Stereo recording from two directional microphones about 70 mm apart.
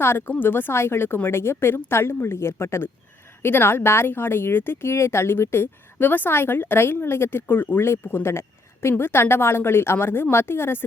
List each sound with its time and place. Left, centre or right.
0.0 s speech: left